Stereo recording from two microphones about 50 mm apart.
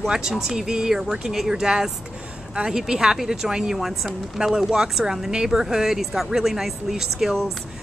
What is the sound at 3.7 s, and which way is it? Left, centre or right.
Speech, centre.